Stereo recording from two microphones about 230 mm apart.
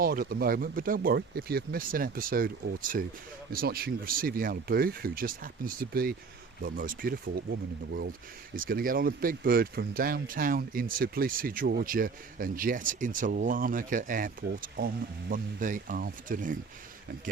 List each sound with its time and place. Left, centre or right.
0.0 s speech: right